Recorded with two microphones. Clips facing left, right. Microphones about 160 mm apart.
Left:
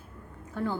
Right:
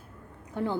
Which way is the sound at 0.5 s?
20° right (ahead or behind).